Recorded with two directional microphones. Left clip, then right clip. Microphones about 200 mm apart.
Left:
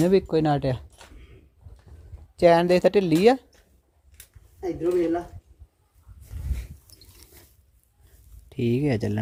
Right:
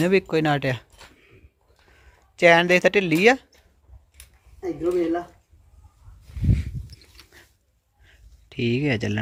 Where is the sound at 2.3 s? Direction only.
15° left (ahead or behind).